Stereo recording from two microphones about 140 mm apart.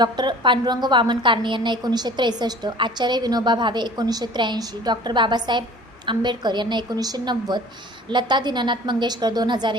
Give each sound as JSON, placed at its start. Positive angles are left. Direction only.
{"t": 0.0, "sound": "a woman's voice", "side_deg": -30}